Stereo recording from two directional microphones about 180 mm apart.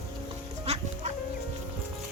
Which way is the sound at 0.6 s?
35° right (ahead or behind).